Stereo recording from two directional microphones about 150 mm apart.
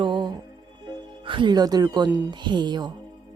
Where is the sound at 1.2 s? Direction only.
35° right (ahead or behind).